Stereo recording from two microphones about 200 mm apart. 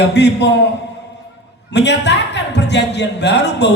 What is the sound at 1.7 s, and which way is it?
Speech, 60° left (ahead or behind).